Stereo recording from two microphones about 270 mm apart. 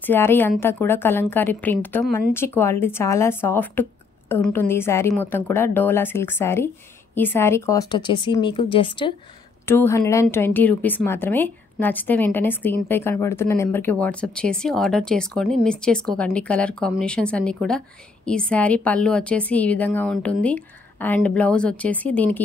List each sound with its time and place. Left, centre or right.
0.0 s a woman's voice: centre